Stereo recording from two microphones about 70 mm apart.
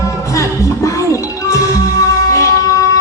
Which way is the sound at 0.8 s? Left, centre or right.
Left.